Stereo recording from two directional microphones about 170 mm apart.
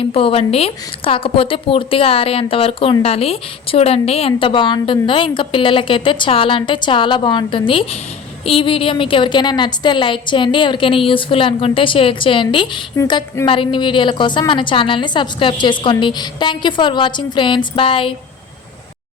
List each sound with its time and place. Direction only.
0.1 s a woman's voice: 35° left (ahead or behind)